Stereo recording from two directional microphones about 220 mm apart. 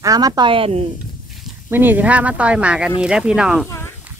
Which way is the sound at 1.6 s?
10° right (ahead or behind).